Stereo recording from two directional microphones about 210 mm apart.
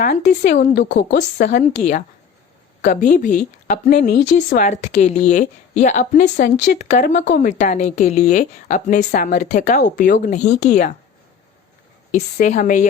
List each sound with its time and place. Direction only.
0.0 s a woman's voice: 35° left (ahead or behind); by 1.2 s 50° left (ahead or behind)
1.7 s a woman's voice: 35° left (ahead or behind)
2.8 s a woman's voice: 45° left (ahead or behind)
3.2 s a woman's voice: 35° left (ahead or behind)
12.1 s a woman's voice: 35° left (ahead or behind)